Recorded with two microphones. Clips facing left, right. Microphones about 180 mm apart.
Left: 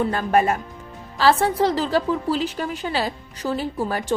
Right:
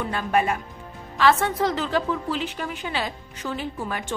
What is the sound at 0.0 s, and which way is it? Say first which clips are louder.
A woman's voice: left 4 dB; 40° left (ahead or behind).